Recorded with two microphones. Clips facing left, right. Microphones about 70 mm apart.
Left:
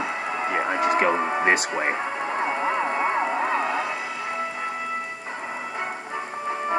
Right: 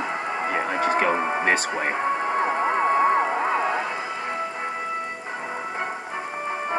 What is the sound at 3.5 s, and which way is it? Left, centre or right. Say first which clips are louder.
Music: right 1 dB; right.